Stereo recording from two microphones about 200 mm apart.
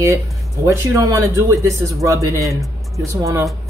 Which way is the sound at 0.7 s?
15° right (ahead or behind).